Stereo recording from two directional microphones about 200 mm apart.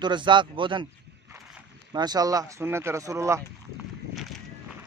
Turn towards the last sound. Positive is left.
turn(degrees=0)  # may be behind; listen again after turning